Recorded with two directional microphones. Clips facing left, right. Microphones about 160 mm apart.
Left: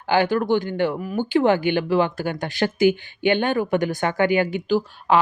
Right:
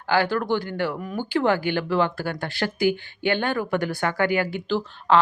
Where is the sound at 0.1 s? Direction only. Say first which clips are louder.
Left 3 dB; 20° left (ahead or behind).